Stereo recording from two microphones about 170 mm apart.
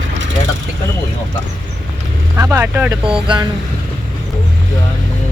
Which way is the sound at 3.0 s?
30° right (ahead or behind).